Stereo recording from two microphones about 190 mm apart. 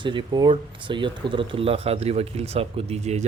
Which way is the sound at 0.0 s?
25° right (ahead or behind).